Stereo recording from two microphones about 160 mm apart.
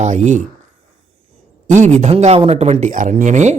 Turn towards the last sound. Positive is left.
turn(degrees=-50)  # may be behind; listen again after turning